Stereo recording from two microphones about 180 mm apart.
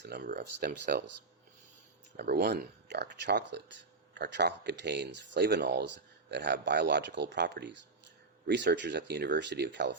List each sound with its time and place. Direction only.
0.0 s speech: 65° right (ahead or behind)
2.1 s speech: 65° right (ahead or behind)